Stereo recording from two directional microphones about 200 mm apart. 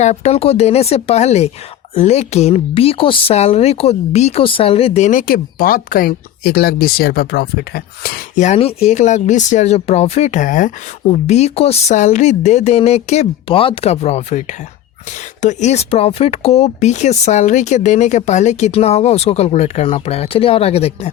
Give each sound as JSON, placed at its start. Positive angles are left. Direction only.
{"t": 0.0, "sound": "speech", "side_deg": 35}